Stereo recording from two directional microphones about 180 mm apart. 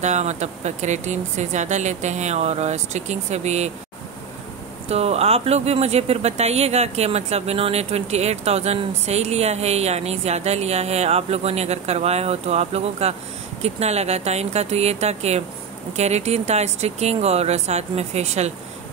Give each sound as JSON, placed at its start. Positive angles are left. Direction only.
{"t": 0.0, "sound": "speech", "side_deg": -40}
{"t": 4.8, "sound": "speech", "side_deg": -35}